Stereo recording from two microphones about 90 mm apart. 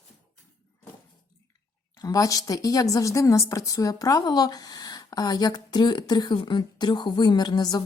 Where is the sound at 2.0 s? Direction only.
45° left (ahead or behind).